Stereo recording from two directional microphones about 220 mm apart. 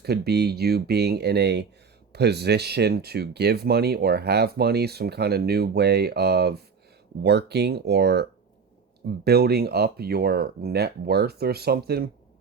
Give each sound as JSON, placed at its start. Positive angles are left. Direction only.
{"t": 0.0, "sound": "speech", "side_deg": -45}